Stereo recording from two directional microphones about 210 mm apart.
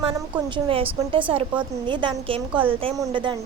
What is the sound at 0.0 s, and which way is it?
A woman's voice, 25° right (ahead or behind).